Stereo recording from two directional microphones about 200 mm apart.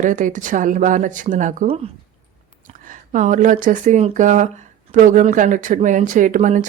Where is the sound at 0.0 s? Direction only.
40° right (ahead or behind).